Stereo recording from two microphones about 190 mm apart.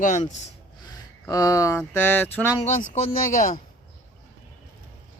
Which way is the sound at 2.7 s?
35° left (ahead or behind).